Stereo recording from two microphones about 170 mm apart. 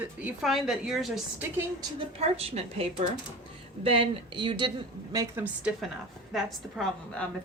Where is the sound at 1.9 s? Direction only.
35° right (ahead or behind).